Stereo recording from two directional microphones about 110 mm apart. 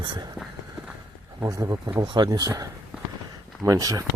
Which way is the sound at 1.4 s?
30° right (ahead or behind).